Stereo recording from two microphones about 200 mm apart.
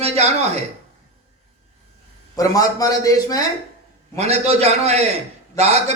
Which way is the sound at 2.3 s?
15° left (ahead or behind).